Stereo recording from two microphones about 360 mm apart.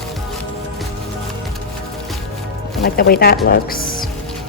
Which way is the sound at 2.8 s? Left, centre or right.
Left.